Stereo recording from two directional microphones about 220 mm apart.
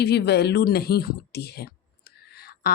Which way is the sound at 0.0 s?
50° left (ahead or behind).